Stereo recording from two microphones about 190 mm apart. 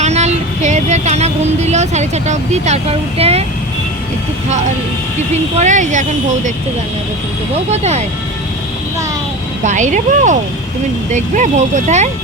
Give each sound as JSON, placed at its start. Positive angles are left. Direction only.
{"t": 0.0, "sound": "vehicle", "side_deg": -35}
{"t": 5.3, "sound": "speech", "side_deg": -35}
{"t": 7.7, "sound": "speech", "side_deg": -35}
{"t": 9.6, "sound": "speech", "side_deg": -40}